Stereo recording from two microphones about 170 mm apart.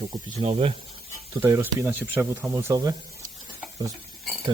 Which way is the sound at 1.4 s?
15° right (ahead or behind).